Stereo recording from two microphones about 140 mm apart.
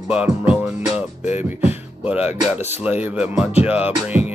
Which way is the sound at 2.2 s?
50° left (ahead or behind).